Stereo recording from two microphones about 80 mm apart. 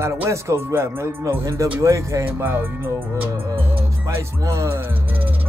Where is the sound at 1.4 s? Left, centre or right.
Right.